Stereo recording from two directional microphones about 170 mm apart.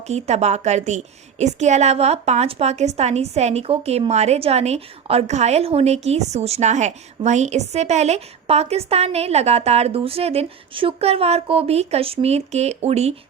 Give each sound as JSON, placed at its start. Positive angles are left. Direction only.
{"t": 0.1, "sound": "a woman's voice", "side_deg": -40}